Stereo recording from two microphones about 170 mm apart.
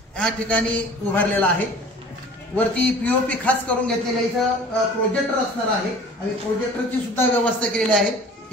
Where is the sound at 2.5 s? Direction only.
10° left (ahead or behind).